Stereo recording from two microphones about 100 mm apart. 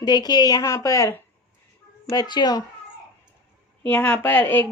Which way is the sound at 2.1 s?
45° left (ahead or behind).